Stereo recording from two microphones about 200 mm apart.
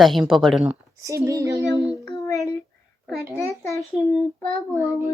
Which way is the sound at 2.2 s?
15° left (ahead or behind).